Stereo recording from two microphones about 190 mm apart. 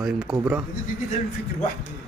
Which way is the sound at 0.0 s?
5° right (ahead or behind).